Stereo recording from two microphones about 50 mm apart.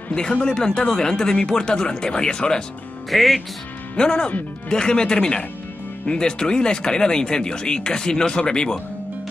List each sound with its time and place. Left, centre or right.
0.1 s speech: centre
3.1 s speech: centre
3.9 s speech: centre